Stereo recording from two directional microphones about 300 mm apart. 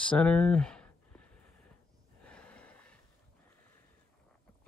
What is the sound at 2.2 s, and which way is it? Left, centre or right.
Gasp, centre.